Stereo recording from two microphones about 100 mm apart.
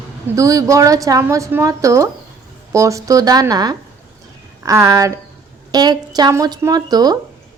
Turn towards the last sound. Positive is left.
turn(degrees=-40)  # may be behind; listen again after turning